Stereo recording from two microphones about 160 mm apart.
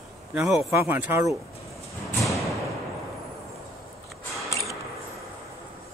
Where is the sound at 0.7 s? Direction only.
15° right (ahead or behind).